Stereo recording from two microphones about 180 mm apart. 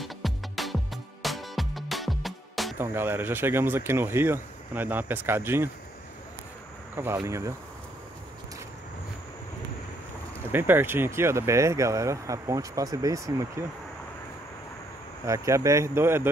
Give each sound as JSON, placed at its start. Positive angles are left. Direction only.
{"t": 0.0, "sound": "music", "side_deg": 0}
{"t": 2.8, "sound": "speech", "side_deg": -10}
{"t": 7.2, "sound": "speech", "side_deg": -15}
{"t": 10.5, "sound": "speech", "side_deg": -10}
{"t": 15.2, "sound": "speech", "side_deg": -15}